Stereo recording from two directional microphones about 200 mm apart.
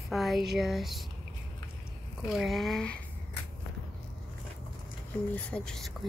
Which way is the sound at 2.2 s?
Centre (ahead or behind).